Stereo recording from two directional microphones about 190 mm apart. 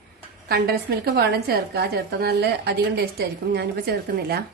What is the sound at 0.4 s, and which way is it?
A woman's voice, 60° right (ahead or behind).